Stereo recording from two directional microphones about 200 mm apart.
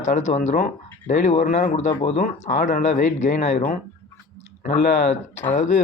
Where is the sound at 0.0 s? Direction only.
40° left (ahead or behind).